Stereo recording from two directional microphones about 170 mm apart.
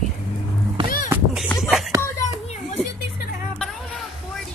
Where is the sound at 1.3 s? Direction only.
Centre (ahead or behind).